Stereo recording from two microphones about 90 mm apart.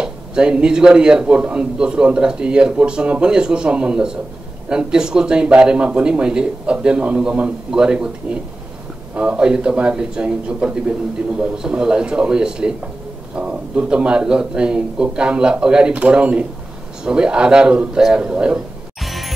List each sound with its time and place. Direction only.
0.0 s a man's voice: 10° right (ahead or behind)
19.0 s music: centre (ahead or behind)